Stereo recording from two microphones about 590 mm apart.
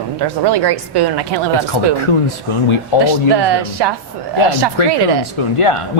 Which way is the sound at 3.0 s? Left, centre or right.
Right.